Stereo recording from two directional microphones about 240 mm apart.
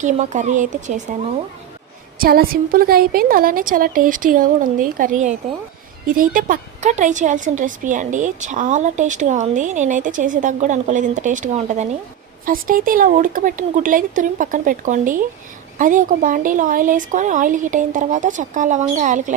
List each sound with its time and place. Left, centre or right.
0.0 s a woman's voice: right
2.1 s a woman's voice: right